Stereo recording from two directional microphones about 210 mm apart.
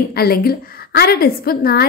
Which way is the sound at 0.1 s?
45° left (ahead or behind).